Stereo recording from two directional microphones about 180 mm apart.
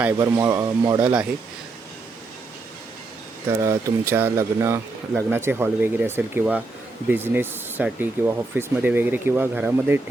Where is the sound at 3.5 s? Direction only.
15° right (ahead or behind).